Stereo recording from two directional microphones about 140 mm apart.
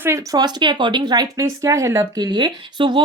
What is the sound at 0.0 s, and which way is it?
Speech, 20° right (ahead or behind).